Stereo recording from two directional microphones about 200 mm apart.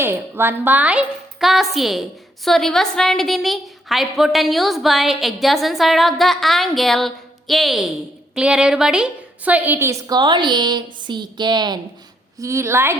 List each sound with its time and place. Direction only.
0.0 s a woman's voice: 10° right (ahead or behind)